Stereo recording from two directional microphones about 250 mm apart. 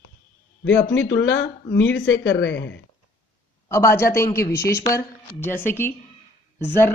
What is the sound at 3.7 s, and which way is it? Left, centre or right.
A man's voice, centre.